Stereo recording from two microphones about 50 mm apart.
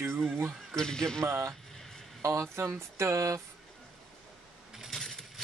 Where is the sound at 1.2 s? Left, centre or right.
Right.